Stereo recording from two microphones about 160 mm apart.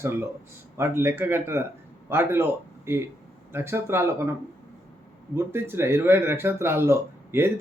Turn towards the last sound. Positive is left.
turn(degrees=-15)  # may be behind; listen again after turning